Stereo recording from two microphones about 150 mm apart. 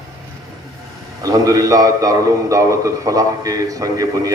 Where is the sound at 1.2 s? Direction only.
25° right (ahead or behind).